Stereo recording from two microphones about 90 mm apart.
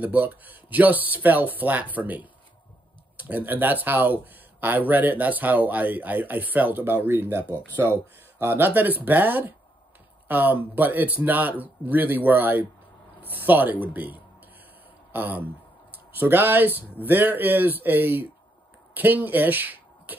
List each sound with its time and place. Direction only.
0.0 s speech: 20° right (ahead or behind)